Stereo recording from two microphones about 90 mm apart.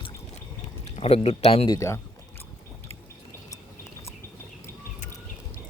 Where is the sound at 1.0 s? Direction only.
90° left.